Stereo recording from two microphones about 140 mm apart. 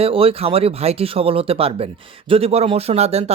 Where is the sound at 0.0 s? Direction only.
40° right (ahead or behind).